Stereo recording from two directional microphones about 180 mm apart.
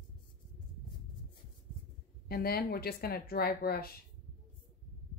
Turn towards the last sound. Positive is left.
turn(degrees=60)  # may be behind; listen again after turning